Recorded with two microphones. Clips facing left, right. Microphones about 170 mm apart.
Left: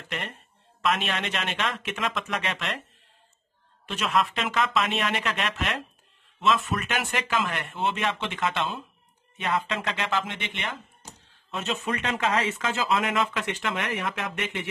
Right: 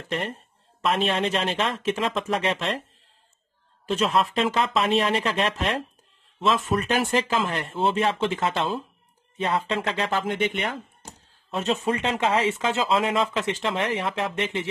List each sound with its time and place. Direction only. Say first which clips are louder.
0.1 s speech: right 6 dB; 35° right (ahead or behind)
3.8 s speech: right 4 dB; 30° right (ahead or behind)